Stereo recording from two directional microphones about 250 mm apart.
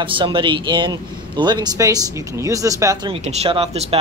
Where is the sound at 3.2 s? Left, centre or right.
Right.